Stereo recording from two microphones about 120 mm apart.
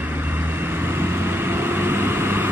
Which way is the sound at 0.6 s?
20° right (ahead or behind).